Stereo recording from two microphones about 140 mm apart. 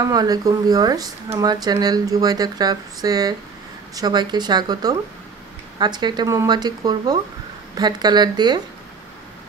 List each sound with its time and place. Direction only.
0.0 s speech: 25° right (ahead or behind)